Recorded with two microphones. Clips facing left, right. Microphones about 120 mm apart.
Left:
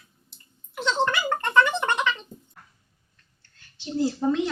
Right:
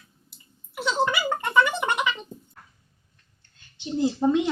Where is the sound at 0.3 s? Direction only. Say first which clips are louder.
Right 2 dB; 5° right (ahead or behind).